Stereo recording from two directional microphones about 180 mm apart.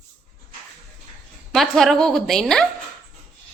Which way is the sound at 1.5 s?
Centre (ahead or behind).